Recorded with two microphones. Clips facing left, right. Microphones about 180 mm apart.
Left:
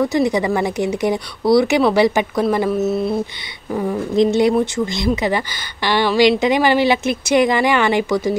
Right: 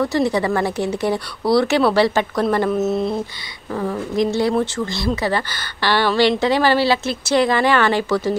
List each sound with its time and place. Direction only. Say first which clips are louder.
0.0 s speech: left 2 dB; 15° left (ahead or behind)